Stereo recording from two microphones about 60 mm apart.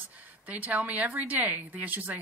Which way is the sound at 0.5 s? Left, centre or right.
Right.